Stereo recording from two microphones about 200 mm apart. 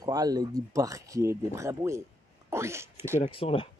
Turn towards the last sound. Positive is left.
turn(degrees=25)  # may be behind; listen again after turning